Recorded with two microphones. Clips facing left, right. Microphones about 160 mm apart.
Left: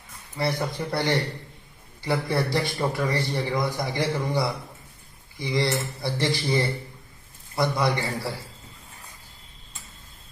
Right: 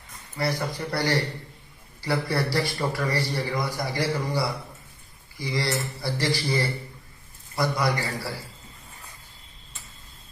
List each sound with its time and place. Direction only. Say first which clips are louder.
0.3 s a man's voice: left 1 dB; 25° left (ahead or behind)